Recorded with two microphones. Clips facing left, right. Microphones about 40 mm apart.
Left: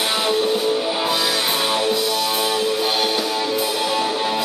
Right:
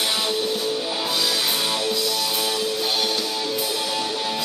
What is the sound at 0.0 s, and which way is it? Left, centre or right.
Music, centre.